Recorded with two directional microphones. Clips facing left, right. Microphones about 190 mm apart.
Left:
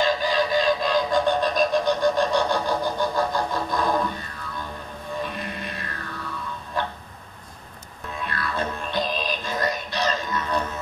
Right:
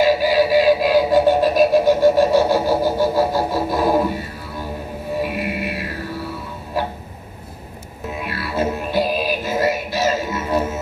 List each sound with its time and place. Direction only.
0.1 s music: 10° right (ahead or behind)
3.2 s didgeridoo: 5° right (ahead or behind)
4.5 s music: 35° right (ahead or behind)
5.1 s music: 10° right (ahead or behind)
6.1 s music: 30° right (ahead or behind)
8.1 s music: 10° right (ahead or behind)